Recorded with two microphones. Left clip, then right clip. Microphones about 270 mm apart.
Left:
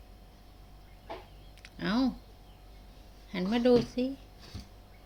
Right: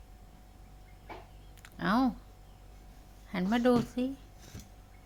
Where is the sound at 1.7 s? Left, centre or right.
Centre.